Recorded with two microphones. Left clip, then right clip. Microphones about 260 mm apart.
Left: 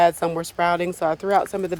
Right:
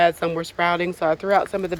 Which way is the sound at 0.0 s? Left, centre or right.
Centre.